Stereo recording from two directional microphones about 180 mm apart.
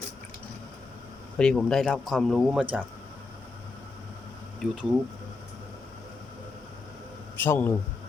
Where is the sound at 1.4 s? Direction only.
5° left (ahead or behind).